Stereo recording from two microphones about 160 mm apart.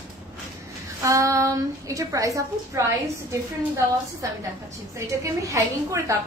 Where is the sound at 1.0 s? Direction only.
20° right (ahead or behind).